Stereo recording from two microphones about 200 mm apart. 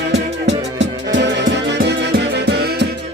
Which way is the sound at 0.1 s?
60° right (ahead or behind).